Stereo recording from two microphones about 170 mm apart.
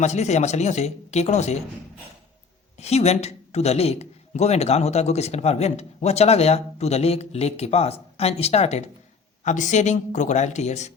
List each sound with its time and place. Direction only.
0.0 s speech: 40° left (ahead or behind)
2.8 s speech: 40° left (ahead or behind)